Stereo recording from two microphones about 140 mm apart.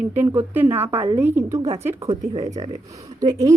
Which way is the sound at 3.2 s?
25° right (ahead or behind).